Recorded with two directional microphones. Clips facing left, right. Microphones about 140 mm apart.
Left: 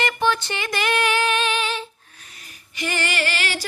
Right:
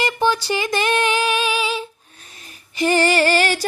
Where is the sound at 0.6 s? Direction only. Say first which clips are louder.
Right 2 dB; 20° right (ahead or behind).